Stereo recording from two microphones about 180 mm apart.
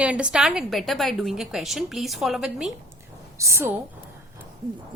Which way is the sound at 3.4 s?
15° right (ahead or behind).